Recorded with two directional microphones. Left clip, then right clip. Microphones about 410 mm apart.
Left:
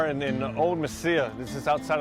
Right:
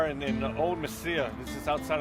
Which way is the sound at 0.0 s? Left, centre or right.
Left.